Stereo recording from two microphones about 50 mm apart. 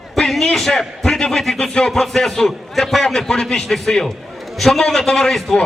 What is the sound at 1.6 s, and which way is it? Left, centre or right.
Music, centre.